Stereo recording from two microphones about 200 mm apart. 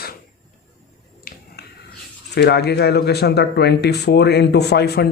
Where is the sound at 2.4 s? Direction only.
55° left (ahead or behind).